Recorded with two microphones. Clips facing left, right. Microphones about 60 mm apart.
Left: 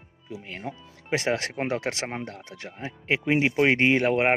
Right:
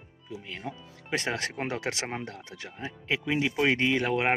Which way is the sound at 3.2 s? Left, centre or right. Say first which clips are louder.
Left 5 dB; left.